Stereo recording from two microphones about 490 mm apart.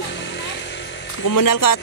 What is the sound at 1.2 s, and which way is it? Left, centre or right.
Speech, left.